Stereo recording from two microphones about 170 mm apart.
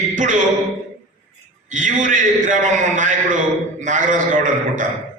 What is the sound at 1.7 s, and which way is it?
A man's voice, 50° right (ahead or behind).